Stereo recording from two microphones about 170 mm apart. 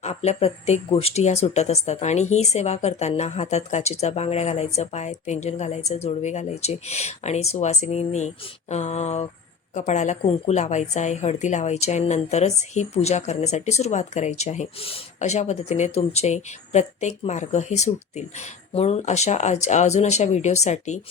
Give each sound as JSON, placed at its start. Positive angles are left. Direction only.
{"t": 0.0, "sound": "a woman's voice", "side_deg": 40}